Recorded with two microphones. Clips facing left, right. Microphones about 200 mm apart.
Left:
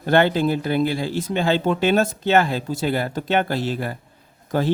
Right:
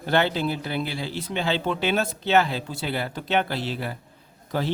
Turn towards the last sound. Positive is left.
turn(degrees=50)  # may be behind; listen again after turning